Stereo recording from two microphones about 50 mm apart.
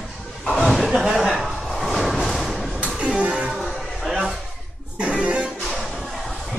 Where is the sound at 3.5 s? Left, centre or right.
Centre.